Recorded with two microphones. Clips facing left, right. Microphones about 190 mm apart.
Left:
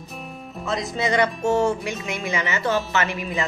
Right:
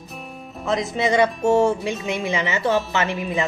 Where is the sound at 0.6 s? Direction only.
20° right (ahead or behind).